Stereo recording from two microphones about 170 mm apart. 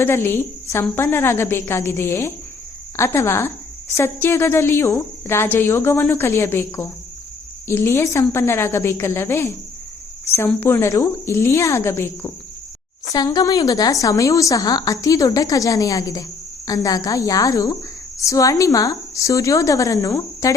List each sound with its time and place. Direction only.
0.0 s a woman's voice: 15° left (ahead or behind)